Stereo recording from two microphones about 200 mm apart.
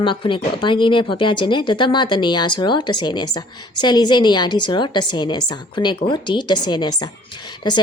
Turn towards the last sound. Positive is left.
turn(degrees=20)  # may be behind; listen again after turning